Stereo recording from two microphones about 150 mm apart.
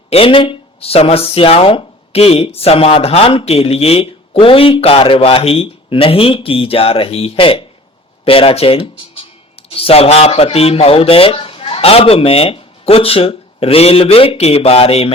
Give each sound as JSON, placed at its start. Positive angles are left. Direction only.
{"t": 0.1, "sound": "speech", "side_deg": 40}